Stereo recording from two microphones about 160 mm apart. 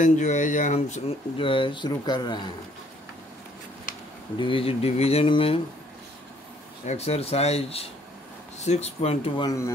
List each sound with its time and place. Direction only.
0.0 s speech: 50° left (ahead or behind)
1.4 s speech: 30° left (ahead or behind)
4.4 s speech: 35° left (ahead or behind)
6.9 s speech: 40° left (ahead or behind)